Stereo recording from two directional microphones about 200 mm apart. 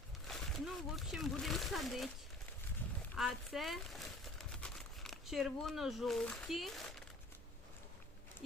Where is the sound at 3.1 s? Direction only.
Centre (ahead or behind).